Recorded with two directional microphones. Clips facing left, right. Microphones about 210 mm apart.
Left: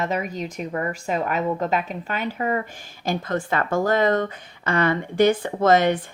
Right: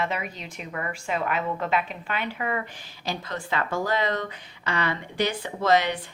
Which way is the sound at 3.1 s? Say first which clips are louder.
Left 7 dB; 50° left (ahead or behind).